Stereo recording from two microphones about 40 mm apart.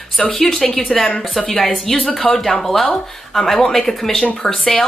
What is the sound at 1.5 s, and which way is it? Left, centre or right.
Speech, centre.